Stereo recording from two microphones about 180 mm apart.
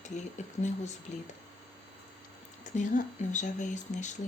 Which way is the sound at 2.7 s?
45° left (ahead or behind).